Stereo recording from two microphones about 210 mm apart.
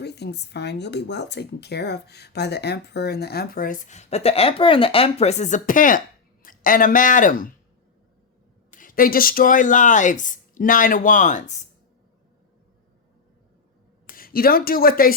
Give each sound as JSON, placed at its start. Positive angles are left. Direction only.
{"t": 0.0, "sound": "speech", "side_deg": 55}
{"t": 8.7, "sound": "speech", "side_deg": 40}
{"t": 14.2, "sound": "speech", "side_deg": 45}